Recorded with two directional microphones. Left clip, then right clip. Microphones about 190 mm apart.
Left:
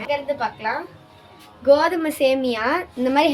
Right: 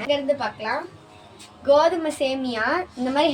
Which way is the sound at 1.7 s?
50° left (ahead or behind).